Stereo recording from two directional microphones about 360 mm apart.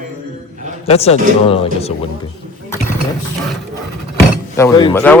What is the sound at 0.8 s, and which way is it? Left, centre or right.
Speech, centre.